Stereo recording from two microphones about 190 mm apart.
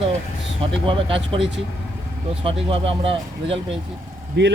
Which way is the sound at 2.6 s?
30° right (ahead or behind).